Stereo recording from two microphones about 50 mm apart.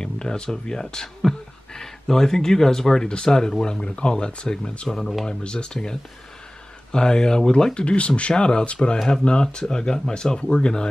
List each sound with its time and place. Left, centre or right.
0.0 s speech: centre
4.8 s speech: centre
5.4 s speech: centre